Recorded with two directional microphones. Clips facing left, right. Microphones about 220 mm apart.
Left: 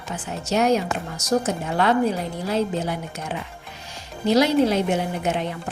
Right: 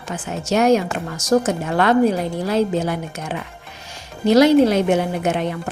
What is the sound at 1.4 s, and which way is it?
Speech, 75° right (ahead or behind).